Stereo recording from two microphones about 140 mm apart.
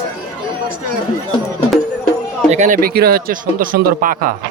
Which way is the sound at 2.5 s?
65° right (ahead or behind).